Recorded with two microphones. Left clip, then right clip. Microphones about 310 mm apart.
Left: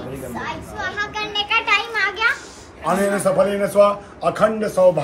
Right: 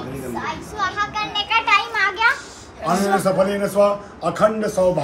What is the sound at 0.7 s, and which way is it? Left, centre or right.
Children playing, right.